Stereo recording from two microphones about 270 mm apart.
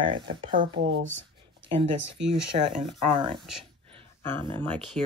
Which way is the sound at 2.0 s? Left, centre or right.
Right.